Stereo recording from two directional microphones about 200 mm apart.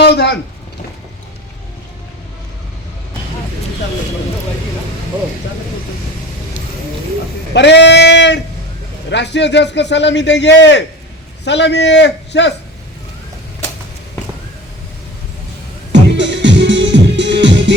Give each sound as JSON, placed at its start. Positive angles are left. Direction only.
{"t": 0.0, "sound": "speech", "side_deg": 60}
{"t": 7.5, "sound": "a man's voice", "side_deg": 60}
{"t": 15.9, "sound": "music", "side_deg": -65}